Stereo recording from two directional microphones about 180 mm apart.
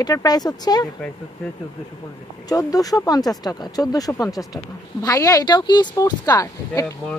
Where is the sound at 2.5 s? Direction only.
20° left (ahead or behind).